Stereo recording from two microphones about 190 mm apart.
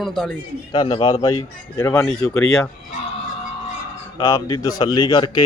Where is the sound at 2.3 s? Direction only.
5° left (ahead or behind).